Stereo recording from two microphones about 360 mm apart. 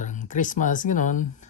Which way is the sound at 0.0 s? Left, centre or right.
Left.